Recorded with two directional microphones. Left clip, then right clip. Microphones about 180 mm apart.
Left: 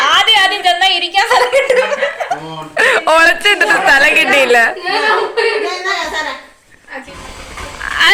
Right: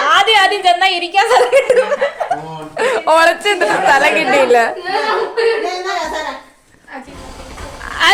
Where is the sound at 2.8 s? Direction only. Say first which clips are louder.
Left 2 dB; 5° right (ahead or behind).